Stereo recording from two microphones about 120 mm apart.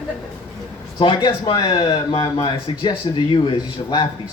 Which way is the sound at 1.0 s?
40° left (ahead or behind).